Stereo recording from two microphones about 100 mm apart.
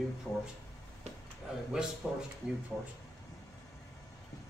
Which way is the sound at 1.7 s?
5° right (ahead or behind).